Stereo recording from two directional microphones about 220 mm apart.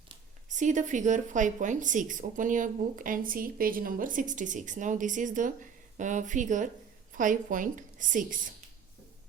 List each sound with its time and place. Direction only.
0.5 s a woman's voice: 35° right (ahead or behind)